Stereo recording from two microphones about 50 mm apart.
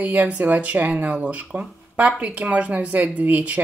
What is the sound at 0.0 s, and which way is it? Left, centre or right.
Speech, right.